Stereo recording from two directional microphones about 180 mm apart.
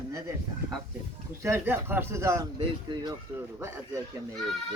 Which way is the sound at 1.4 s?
10° right (ahead or behind).